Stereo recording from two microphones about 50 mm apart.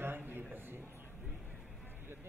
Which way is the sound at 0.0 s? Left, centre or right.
Right.